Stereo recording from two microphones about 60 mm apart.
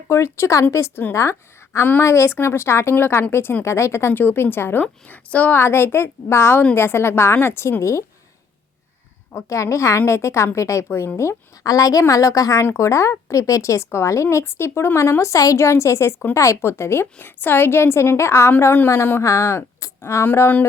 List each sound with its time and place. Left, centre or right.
0.1 s a woman's voice: left
4.1 s a woman's voice: left
5.5 s a woman's voice: left
7.8 s speech: left
9.5 s speech: left
10.8 s speech: left
11.6 s a woman's voice: left
12.6 s speech: left
15.2 s speech: left
15.6 s speech: left
19.2 s speech: left